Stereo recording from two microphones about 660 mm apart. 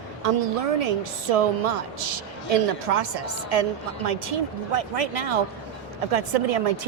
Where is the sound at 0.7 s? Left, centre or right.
Right.